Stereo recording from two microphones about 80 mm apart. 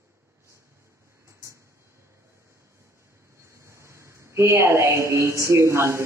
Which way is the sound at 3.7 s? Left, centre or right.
Right.